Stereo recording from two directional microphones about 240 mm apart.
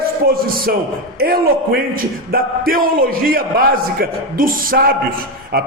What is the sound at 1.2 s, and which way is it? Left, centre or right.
A man's voice, right.